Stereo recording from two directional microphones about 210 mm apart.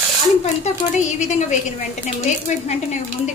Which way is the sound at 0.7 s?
35° left (ahead or behind).